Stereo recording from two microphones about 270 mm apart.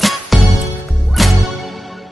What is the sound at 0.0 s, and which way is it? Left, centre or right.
Music, centre.